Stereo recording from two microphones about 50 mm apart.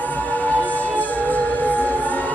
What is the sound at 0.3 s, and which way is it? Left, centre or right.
Music, left.